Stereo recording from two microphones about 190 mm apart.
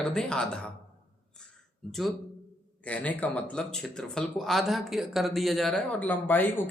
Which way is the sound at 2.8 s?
5° left (ahead or behind).